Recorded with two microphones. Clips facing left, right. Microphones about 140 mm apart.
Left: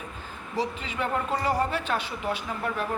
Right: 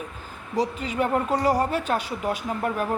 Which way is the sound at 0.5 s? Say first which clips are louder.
Right 5 dB; 40° right (ahead or behind).